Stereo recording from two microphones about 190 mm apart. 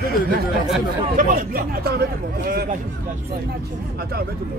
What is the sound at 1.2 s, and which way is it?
Speech, 50° right (ahead or behind).